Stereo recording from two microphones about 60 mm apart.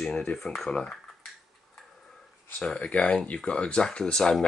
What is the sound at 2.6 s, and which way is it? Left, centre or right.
Speech, centre.